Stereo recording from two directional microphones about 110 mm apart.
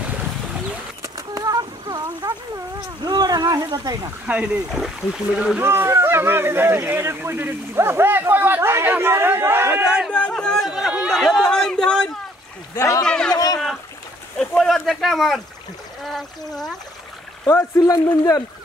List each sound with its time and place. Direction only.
1.0 s a sound: 30° right (ahead or behind)
3.0 s speech: 40° right (ahead or behind)
4.3 s speech: 10° right (ahead or behind)
5.6 s speech: 20° right (ahead or behind)
10.1 s a sound: 10° left (ahead or behind)
10.7 s speech: 5° right (ahead or behind)
12.7 s a man's voice: 25° left (ahead or behind)
13.0 s speech: 5° left (ahead or behind)
14.6 s a man's voice: centre (ahead or behind)
17.5 s a man's voice: 25° left (ahead or behind)